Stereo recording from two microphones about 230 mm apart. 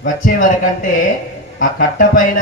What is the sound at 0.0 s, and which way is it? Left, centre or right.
Speech, left.